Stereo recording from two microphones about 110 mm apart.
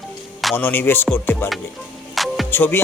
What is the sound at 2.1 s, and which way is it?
Music, centre (ahead or behind).